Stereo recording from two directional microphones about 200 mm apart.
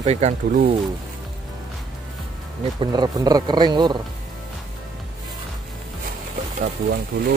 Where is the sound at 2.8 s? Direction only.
20° right (ahead or behind).